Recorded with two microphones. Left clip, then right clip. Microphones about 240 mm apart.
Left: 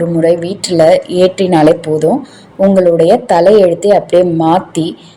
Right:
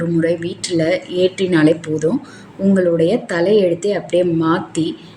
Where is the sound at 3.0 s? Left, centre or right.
Centre.